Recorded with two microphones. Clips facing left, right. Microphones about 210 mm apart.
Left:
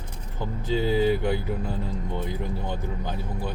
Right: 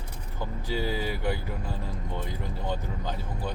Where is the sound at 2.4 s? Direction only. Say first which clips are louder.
Left 2 dB; 15° left (ahead or behind).